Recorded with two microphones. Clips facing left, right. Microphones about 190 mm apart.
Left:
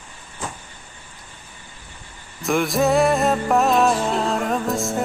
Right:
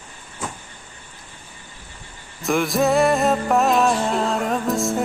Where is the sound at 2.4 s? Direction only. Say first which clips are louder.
Even; centre (ahead or behind).